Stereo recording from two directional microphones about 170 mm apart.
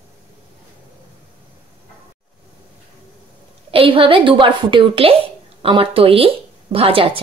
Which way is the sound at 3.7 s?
30° right (ahead or behind).